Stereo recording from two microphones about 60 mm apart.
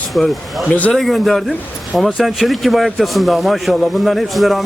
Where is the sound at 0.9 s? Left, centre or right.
Centre.